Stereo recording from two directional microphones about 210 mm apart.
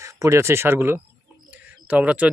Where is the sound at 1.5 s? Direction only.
5° right (ahead or behind).